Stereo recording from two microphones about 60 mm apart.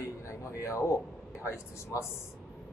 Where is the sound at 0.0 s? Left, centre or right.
Left.